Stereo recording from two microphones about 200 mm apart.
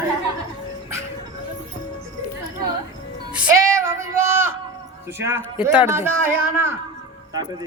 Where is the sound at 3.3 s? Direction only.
10° right (ahead or behind).